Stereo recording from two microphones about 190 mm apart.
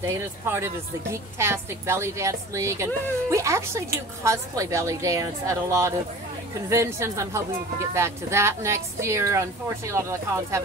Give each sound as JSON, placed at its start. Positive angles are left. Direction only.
{"t": 0.0, "sound": "a woman's voice", "side_deg": -15}